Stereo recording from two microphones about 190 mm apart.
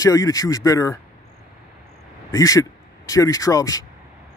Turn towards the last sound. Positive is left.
turn(degrees=20)  # may be behind; listen again after turning